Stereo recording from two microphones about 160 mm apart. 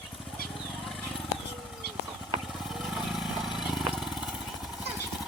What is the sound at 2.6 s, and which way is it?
Vehicle, centre (ahead or behind).